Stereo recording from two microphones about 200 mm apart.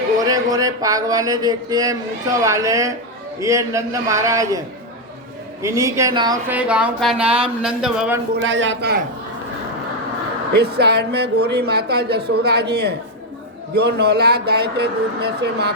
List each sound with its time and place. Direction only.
0.3 s speech: 15° right (ahead or behind)
5.6 s speech: 15° right (ahead or behind)
6.5 s speech: 5° right (ahead or behind)
8.4 s a man's voice: 65° right (ahead or behind)
10.5 s speech: 55° right (ahead or behind)